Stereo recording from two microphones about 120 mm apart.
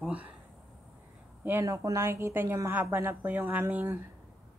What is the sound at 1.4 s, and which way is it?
Speech, 20° right (ahead or behind).